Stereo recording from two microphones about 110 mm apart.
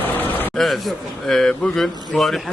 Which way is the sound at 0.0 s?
15° left (ahead or behind).